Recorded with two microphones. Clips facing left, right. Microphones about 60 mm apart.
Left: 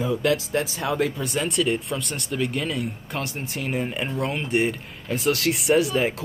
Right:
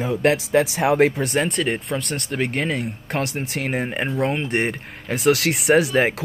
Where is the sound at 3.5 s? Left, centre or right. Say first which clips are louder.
Right 3 dB; right.